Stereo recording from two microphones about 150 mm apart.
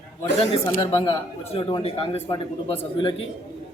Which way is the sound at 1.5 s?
35° left (ahead or behind).